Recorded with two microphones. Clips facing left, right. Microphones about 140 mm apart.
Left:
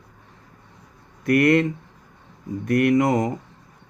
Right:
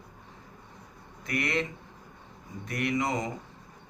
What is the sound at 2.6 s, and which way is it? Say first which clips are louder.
Speech: left 11 dB; 55° left (ahead or behind).